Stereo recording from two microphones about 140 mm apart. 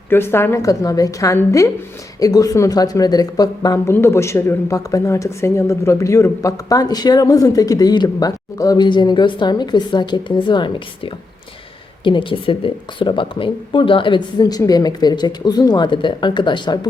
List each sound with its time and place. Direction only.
0.1 s speech: 15° left (ahead or behind)
3.9 s speech: 20° left (ahead or behind)